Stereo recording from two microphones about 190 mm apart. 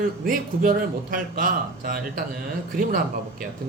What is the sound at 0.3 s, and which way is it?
Speech, 50° right (ahead or behind).